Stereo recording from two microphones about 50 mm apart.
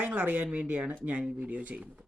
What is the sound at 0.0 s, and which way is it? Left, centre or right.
Speech, right.